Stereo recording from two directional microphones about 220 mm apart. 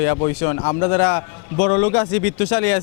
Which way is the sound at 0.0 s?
15° left (ahead or behind).